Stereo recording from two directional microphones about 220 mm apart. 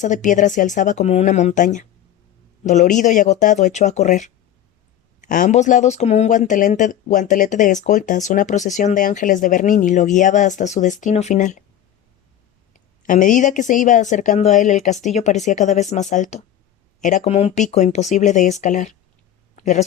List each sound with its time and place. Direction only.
0.0 s speech: 35° left (ahead or behind)
13.1 s speech: 35° left (ahead or behind)
19.5 s a sound: 30° left (ahead or behind)